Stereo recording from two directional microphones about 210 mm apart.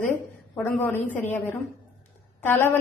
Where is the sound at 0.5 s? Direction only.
10° left (ahead or behind).